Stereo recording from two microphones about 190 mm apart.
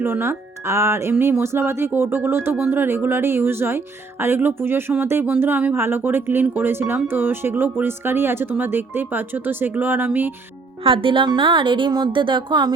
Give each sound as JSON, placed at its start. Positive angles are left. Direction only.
{"t": 0.0, "sound": "speech", "side_deg": -10}
{"t": 10.8, "sound": "a woman's voice", "side_deg": -30}